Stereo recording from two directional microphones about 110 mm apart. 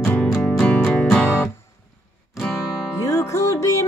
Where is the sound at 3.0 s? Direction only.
25° left (ahead or behind).